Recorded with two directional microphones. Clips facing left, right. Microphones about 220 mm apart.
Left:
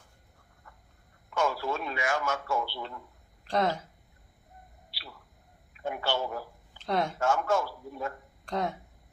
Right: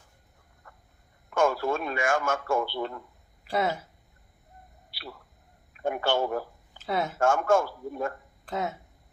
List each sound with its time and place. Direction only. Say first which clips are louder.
1.3 s a man's voice: right 5 dB; 50° right (ahead or behind)
3.4 s speech: even; 10° right (ahead or behind)
5.7 s a man's voice: right 5 dB; 50° right (ahead or behind)
6.7 s speech: even; 5° right (ahead or behind)
7.2 s a man's voice: right 8 dB; 50° right (ahead or behind)
8.4 s speech: even; 5° right (ahead or behind)